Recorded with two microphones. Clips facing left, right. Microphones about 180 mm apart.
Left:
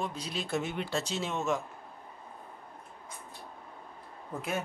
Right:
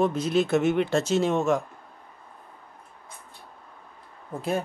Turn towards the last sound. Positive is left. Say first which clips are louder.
# right 7 dB
turn(degrees=-35)  # may be behind; listen again after turning